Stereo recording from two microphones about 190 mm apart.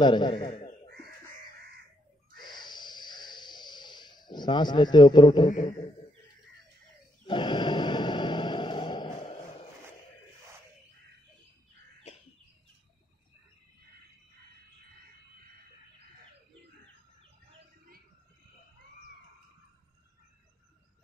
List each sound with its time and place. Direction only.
0.0 s a man's voice: 25° left (ahead or behind)
2.3 s music: 25° left (ahead or behind)
7.2 s a sound: 25° left (ahead or behind)